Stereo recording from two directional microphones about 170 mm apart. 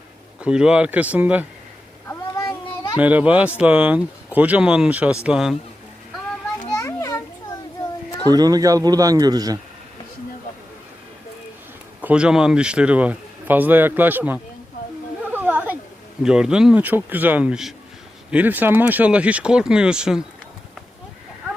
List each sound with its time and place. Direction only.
0.3 s speech: 5° right (ahead or behind)
2.0 s child singing: 15° left (ahead or behind)
3.0 s speech: 10° right (ahead or behind)
6.7 s children playing: 15° left (ahead or behind)
8.3 s speech: 20° right (ahead or behind)
12.0 s speech: 5° right (ahead or behind)
15.3 s a sound: 10° right (ahead or behind)
16.2 s speech: 5° right (ahead or behind)